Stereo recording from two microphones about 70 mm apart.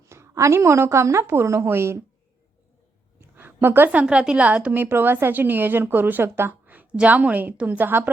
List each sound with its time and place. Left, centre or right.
0.1 s a woman's voice: right
3.2 s a sound: right
3.9 s a woman's voice: centre
4.8 s speech: right